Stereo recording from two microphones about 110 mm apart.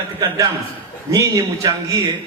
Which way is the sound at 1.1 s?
30° right (ahead or behind).